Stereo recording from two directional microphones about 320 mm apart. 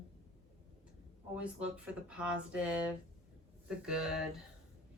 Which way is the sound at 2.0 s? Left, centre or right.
Centre.